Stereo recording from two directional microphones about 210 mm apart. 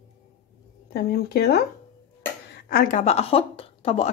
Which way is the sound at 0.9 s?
50° left (ahead or behind).